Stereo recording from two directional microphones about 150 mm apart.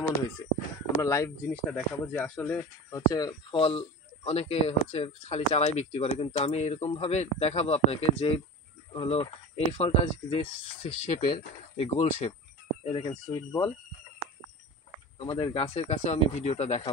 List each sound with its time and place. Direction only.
0.9 s speech: 20° left (ahead or behind)
1.7 s speech: 5° left (ahead or behind)
2.9 s speech: 25° left (ahead or behind); by 12.4 s 45° left (ahead or behind)
12.9 s speech: 30° left (ahead or behind)
15.1 s speech: 35° left (ahead or behind)